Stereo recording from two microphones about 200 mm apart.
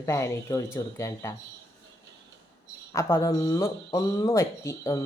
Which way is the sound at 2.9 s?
15° left (ahead or behind).